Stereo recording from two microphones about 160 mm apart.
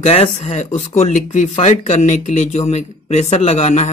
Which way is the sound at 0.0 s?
40° left (ahead or behind).